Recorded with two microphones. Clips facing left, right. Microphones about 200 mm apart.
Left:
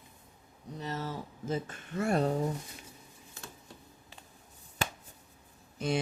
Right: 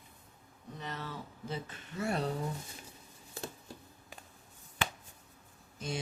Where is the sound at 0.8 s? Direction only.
40° left (ahead or behind).